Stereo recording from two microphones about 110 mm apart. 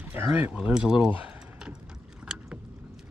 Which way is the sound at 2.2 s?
10° right (ahead or behind).